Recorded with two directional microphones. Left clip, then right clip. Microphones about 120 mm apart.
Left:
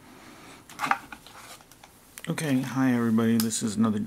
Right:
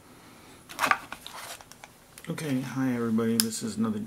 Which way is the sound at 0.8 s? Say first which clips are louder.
Right 2 dB; 35° right (ahead or behind).